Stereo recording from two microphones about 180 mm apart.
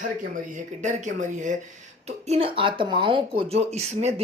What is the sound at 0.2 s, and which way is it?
Speech, 45° right (ahead or behind).